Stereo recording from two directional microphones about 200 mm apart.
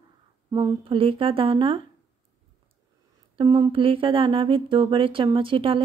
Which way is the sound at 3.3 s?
20° right (ahead or behind).